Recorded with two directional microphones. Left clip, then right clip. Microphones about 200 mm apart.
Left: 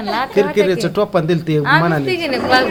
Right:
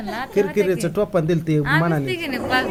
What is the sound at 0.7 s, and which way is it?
Speech, 25° right (ahead or behind).